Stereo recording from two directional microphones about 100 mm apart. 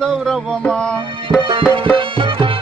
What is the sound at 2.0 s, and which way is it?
Music, 60° right (ahead or behind).